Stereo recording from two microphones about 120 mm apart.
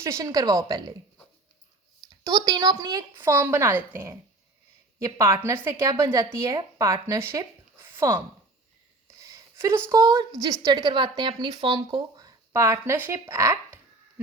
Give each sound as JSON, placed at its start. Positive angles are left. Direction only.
{"t": 0.0, "sound": "a woman's voice", "side_deg": -25}
{"t": 2.0, "sound": "speech", "side_deg": -35}
{"t": 3.2, "sound": "a woman's voice", "side_deg": -20}
{"t": 9.0, "sound": "a sound", "side_deg": -25}
{"t": 9.9, "sound": "speech", "side_deg": -30}
{"t": 12.2, "sound": "speech", "side_deg": -25}